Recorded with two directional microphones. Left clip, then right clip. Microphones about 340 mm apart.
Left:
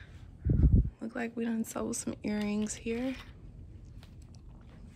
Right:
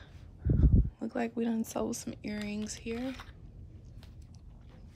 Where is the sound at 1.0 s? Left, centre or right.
Centre.